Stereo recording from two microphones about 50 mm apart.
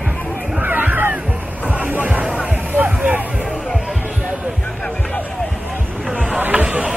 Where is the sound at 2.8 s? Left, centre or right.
Right.